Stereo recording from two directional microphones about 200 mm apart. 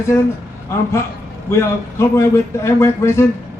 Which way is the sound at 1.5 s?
15° left (ahead or behind).